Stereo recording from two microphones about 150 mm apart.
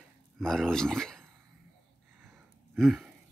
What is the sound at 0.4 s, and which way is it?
Speech, 5° left (ahead or behind).